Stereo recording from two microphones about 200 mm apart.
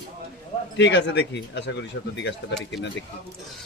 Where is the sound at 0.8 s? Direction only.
60° left (ahead or behind).